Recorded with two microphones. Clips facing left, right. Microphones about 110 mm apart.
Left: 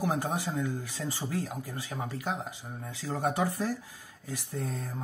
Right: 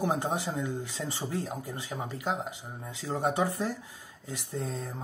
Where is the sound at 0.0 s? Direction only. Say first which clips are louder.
Right 1 dB; 25° right (ahead or behind).